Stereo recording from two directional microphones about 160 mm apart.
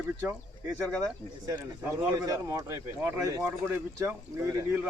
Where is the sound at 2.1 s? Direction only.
25° right (ahead or behind).